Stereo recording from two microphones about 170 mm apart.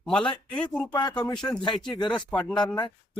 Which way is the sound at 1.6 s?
25° left (ahead or behind).